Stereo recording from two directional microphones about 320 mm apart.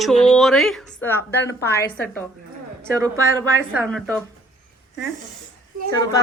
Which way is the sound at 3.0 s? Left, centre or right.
Centre.